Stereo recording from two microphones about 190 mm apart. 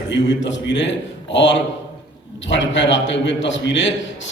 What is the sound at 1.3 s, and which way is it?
A man's voice, 70° left (ahead or behind).